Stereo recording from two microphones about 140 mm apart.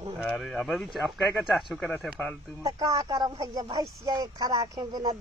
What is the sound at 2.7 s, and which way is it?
Speech, 25° right (ahead or behind).